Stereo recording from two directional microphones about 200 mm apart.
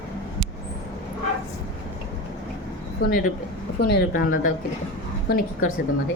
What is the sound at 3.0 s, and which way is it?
Speech, 55° left (ahead or behind).